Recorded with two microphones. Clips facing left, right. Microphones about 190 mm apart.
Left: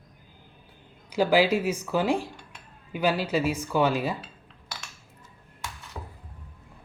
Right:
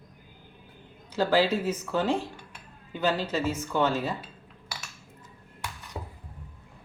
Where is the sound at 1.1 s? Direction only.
10° left (ahead or behind).